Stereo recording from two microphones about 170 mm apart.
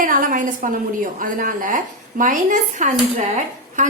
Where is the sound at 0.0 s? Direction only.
50° right (ahead or behind).